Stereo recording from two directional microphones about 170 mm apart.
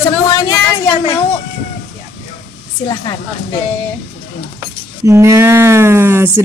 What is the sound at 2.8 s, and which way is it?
Speech, 25° left (ahead or behind).